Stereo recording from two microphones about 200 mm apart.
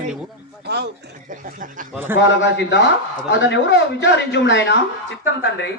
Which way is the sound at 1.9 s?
10° right (ahead or behind).